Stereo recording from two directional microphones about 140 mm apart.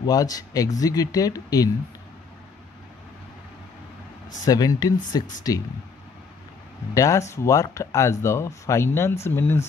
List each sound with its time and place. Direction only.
0.0 s speech: 25° left (ahead or behind)
4.5 s speech: 25° left (ahead or behind)
6.9 s speech: 20° left (ahead or behind)